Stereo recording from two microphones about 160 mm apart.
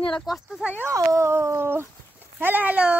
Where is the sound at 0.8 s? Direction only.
20° right (ahead or behind).